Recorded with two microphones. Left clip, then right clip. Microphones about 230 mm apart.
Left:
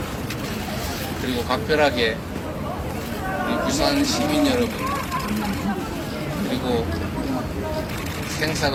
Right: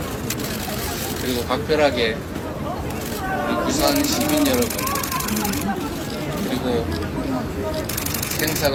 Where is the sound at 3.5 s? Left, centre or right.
Left.